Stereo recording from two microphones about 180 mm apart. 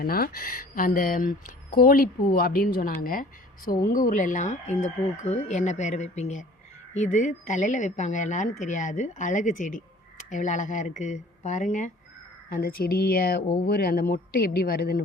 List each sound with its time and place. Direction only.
0.0 s speech: 55° left (ahead or behind)
12.5 s speech: 55° left (ahead or behind)